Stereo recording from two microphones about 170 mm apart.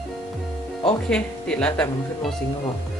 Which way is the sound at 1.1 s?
5° left (ahead or behind).